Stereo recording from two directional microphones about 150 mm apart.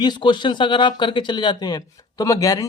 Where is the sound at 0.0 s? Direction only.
30° left (ahead or behind).